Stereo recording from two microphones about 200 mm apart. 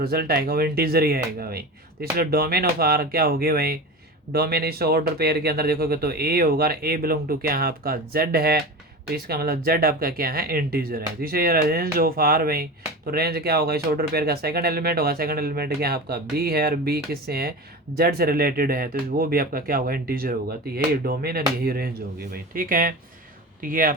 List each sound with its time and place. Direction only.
0.0 s speech: 50° right (ahead or behind)